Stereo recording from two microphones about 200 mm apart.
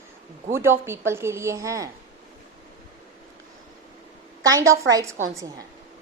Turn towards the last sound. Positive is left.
turn(degrees=-15)  # may be behind; listen again after turning